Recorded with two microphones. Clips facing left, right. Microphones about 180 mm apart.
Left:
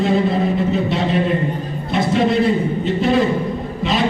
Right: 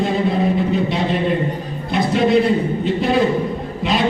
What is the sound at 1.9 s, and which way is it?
A man's voice, centre (ahead or behind).